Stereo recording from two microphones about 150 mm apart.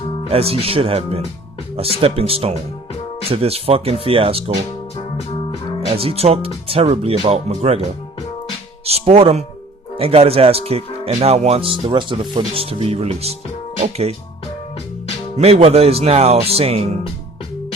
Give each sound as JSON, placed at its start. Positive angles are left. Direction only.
{"t": 0.3, "sound": "speech", "side_deg": -40}
{"t": 5.9, "sound": "speech", "side_deg": -40}
{"t": 8.8, "sound": "speech", "side_deg": -45}
{"t": 15.4, "sound": "speech", "side_deg": -45}